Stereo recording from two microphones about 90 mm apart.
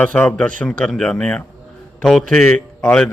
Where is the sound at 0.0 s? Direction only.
15° left (ahead or behind).